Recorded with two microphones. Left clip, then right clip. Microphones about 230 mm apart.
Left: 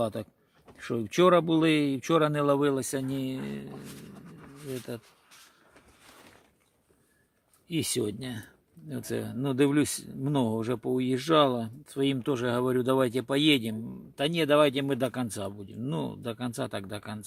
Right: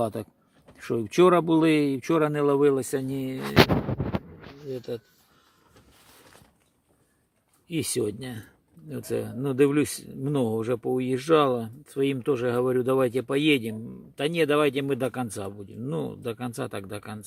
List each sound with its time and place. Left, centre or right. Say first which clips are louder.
0.0 s speech: right 2 dB; centre
7.7 s speech: right 2 dB; centre